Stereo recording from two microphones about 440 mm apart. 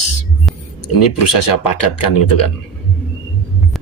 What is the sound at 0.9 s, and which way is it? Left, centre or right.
Speech, left.